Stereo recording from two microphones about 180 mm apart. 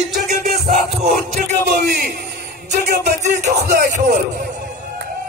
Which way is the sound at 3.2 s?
40° right (ahead or behind).